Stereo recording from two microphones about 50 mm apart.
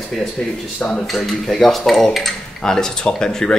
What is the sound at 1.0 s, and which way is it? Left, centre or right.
Speech, centre.